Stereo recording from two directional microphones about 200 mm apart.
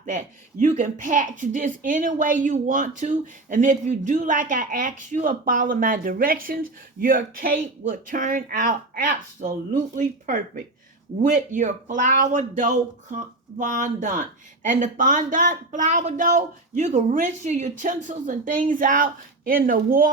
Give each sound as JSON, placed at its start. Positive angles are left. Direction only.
{"t": 0.6, "sound": "a woman's voice", "side_deg": -40}